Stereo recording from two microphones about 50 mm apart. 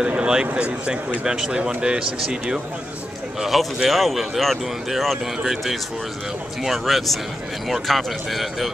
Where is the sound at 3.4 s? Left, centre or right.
Centre.